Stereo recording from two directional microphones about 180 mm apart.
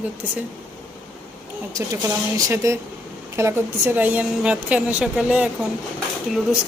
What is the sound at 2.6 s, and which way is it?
A woman's voice, 20° right (ahead or behind).